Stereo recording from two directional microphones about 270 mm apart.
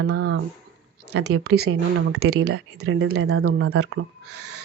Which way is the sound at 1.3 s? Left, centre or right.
Right.